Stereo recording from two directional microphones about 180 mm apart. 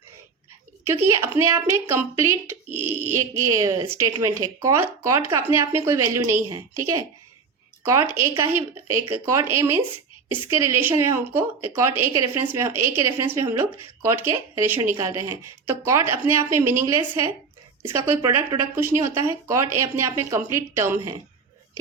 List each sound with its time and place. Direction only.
0.9 s a woman's voice: 15° right (ahead or behind)
7.9 s a woman's voice: 15° right (ahead or behind)